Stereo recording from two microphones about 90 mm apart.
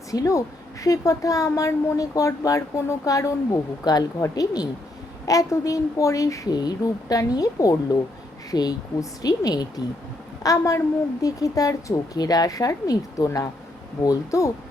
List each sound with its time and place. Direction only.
0.1 s a woman's voice: 40° left (ahead or behind)